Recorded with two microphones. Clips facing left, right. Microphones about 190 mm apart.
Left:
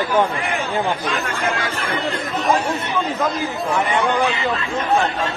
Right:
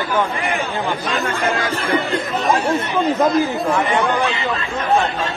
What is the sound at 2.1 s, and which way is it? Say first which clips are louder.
Speech: right 1 dB; centre (ahead or behind).